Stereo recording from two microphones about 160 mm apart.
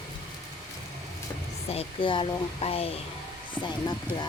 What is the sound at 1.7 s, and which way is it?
Speech, 35° left (ahead or behind).